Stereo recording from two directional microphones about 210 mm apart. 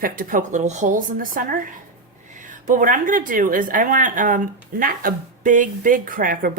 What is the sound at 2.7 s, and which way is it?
Speech, 40° right (ahead or behind).